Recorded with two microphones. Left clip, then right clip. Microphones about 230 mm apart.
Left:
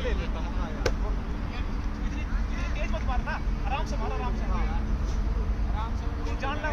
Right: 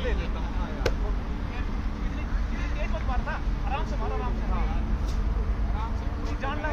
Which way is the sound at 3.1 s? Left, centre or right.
Left.